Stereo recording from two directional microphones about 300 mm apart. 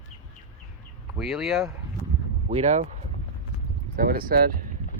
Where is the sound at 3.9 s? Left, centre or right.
Right.